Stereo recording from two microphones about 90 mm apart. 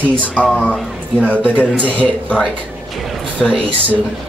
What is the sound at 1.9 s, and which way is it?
A man's voice, 15° left (ahead or behind).